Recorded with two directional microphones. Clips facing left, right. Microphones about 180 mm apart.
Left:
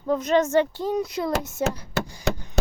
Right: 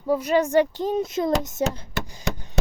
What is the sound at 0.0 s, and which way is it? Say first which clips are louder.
Speech: even; 10° right (ahead or behind).